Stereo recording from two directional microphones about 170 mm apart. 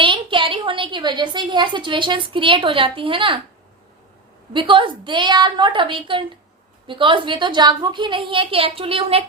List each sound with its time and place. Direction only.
0.0 s a woman's voice: 30° right (ahead or behind)
4.5 s a woman's voice: 30° right (ahead or behind)